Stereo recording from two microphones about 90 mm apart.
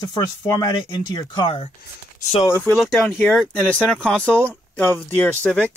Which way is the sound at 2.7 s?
Centre (ahead or behind).